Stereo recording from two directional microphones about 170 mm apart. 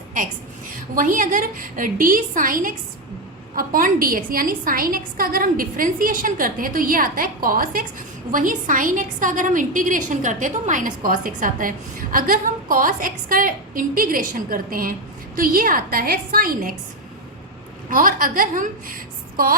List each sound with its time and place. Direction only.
0.9 s a woman's voice: 50° right (ahead or behind)
17.8 s a woman's voice: 55° right (ahead or behind)